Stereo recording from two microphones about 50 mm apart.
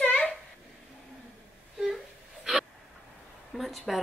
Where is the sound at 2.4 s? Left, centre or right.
Centre.